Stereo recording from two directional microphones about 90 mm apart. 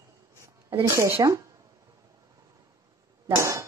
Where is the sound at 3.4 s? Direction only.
35° right (ahead or behind).